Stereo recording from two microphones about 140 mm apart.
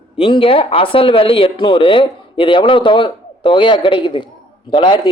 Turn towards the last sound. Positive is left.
turn(degrees=30)  # may be behind; listen again after turning